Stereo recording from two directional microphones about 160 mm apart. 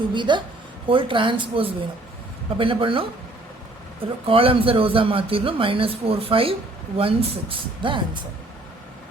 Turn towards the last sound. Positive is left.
turn(degrees=-30)  # may be behind; listen again after turning